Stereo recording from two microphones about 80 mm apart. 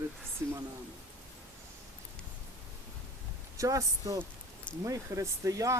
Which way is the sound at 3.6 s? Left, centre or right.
Right.